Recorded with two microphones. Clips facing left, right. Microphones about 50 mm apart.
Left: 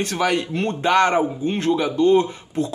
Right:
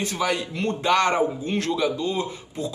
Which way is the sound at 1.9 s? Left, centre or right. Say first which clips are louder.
Left 10 dB; left.